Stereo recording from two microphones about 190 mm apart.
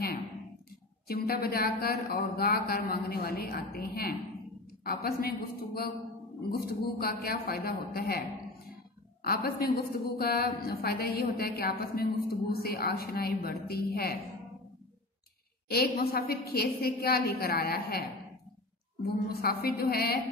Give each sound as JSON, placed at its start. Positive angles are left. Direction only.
{"t": 1.0, "sound": "a woman's voice", "side_deg": 50}
{"t": 9.2, "sound": "a woman's voice", "side_deg": 55}
{"t": 15.7, "sound": "a woman's voice", "side_deg": 55}